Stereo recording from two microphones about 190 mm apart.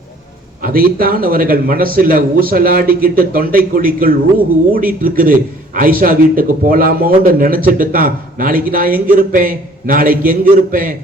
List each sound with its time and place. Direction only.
0.6 s a man's voice: 50° right (ahead or behind)